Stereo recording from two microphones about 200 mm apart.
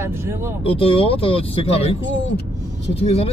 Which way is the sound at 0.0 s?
10° right (ahead or behind).